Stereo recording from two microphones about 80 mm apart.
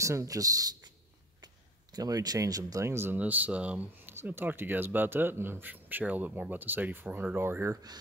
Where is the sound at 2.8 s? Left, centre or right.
Right.